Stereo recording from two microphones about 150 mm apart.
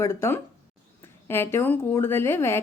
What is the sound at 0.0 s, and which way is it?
Speech, 20° left (ahead or behind).